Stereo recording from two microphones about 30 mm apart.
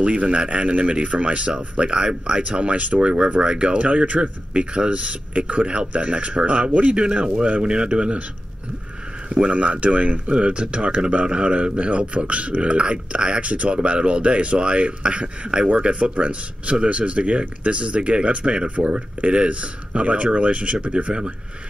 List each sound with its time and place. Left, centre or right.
0.0 s speech: right
2.0 s speech: right
2.5 s speech: right
6.9 s speech: right
9.3 s speech: right
10.3 s speech: right